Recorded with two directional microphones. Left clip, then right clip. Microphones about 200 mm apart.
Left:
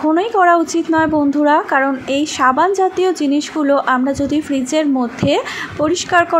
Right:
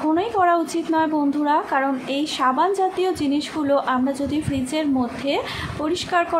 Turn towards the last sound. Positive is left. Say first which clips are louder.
# left 7 dB
turn(degrees=25)  # may be behind; listen again after turning